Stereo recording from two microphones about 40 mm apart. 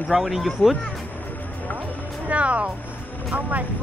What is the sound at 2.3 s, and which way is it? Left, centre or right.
Music, right.